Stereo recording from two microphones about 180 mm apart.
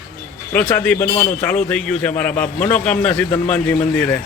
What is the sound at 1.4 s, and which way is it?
A man's voice, 10° left (ahead or behind).